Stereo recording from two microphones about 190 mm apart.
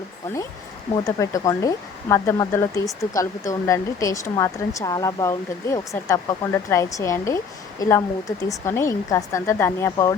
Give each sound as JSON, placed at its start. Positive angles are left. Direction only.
{"t": 1.0, "sound": "speech", "side_deg": 15}